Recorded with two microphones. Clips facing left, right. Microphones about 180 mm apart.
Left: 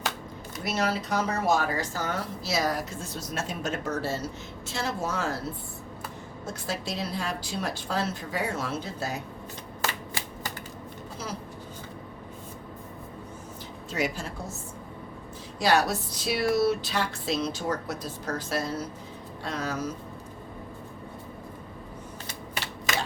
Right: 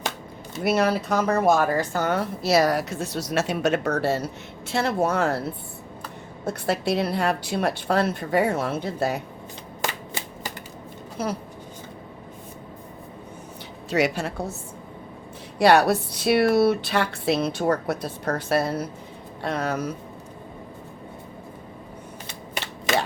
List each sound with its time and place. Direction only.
0.6 s speech: 55° right (ahead or behind)
6.4 s speech: 65° right (ahead or behind)
11.2 s speech: 60° right (ahead or behind)
13.9 s a woman's voice: 70° right (ahead or behind)
15.5 s speech: 65° right (ahead or behind)